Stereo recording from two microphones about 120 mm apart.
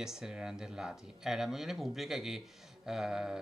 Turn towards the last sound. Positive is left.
turn(degrees=-5)  # may be behind; listen again after turning